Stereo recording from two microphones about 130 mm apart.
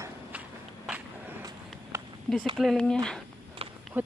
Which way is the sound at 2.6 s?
5° left (ahead or behind).